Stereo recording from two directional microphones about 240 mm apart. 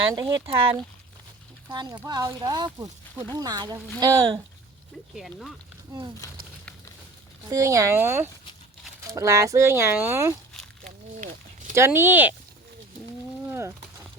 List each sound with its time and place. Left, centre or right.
0.1 s speech: centre
5.1 s speech: centre
7.5 s speech: centre
10.5 s a sound: centre
11.7 s speech: centre
13.5 s a sound: centre